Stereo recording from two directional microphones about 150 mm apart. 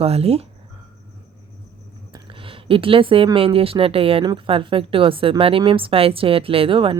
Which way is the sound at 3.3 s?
40° right (ahead or behind).